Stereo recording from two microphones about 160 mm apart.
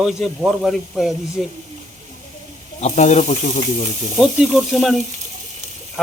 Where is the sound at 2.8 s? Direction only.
50° left (ahead or behind).